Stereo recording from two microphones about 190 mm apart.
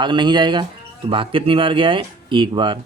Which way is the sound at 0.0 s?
25° right (ahead or behind).